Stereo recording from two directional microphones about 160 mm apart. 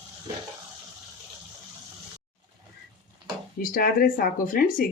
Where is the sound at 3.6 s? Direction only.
65° left (ahead or behind).